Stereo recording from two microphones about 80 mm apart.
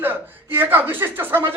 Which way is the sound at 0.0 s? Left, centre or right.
Right.